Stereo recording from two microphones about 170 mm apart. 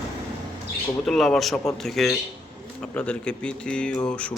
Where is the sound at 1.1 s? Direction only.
Centre (ahead or behind).